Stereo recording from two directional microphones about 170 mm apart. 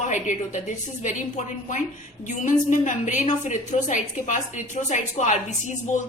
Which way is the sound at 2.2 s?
45° left (ahead or behind).